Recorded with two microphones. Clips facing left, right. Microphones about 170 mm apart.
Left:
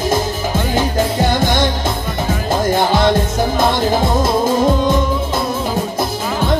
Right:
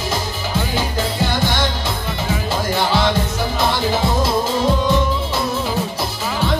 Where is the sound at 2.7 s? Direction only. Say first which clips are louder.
Left 3 dB; 50° left (ahead or behind).